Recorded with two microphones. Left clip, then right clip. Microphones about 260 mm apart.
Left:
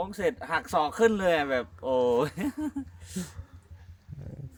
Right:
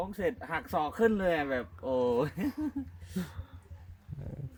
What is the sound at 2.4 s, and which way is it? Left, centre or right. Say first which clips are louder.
Speech: left 2 dB; left.